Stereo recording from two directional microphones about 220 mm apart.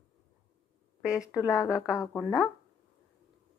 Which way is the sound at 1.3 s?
15° left (ahead or behind).